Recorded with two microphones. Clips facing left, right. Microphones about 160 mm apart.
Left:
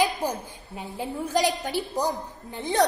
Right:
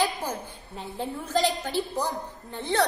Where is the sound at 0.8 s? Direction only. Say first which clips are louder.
Left 2 dB; 10° left (ahead or behind).